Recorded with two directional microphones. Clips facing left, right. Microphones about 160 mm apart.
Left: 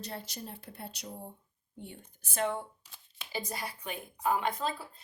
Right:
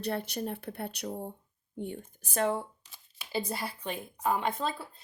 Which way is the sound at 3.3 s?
30° right (ahead or behind).